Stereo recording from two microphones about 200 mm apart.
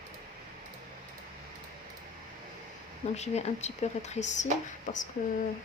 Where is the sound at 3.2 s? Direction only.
35° left (ahead or behind).